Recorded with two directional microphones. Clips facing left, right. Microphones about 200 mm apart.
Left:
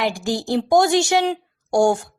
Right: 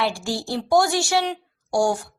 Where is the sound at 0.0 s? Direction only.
20° left (ahead or behind).